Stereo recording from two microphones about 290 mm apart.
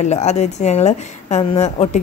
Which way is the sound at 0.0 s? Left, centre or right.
Left.